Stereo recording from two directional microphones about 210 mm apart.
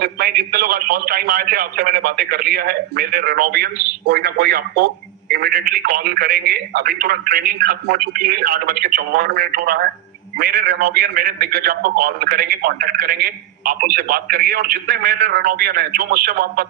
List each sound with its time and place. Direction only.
0.0 s a man's voice: 45° right (ahead or behind)